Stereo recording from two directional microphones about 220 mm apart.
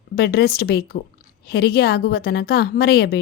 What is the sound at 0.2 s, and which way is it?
A woman's voice, 45° left (ahead or behind).